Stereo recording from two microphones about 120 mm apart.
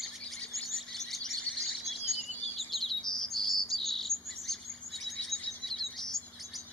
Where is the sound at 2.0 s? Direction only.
60° left (ahead or behind).